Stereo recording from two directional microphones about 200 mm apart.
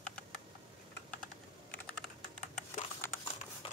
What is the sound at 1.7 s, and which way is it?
Computer keyboard, 5° left (ahead or behind).